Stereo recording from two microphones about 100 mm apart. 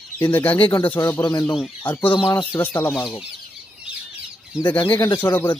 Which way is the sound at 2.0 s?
55° left (ahead or behind).